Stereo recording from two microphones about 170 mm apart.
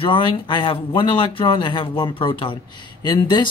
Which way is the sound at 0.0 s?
30° left (ahead or behind).